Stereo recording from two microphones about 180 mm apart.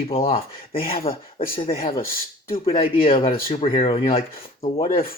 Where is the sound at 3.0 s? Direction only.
30° left (ahead or behind).